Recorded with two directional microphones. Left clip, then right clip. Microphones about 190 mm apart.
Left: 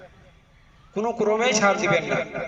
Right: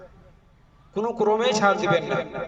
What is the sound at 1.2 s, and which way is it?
Speech, 45° right (ahead or behind).